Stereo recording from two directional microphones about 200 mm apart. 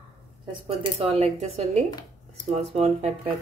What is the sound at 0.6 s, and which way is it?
Speech, 30° right (ahead or behind).